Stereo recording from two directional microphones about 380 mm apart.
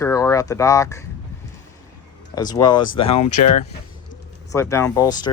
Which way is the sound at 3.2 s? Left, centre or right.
Left.